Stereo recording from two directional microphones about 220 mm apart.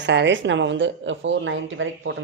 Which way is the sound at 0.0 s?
55° right (ahead or behind).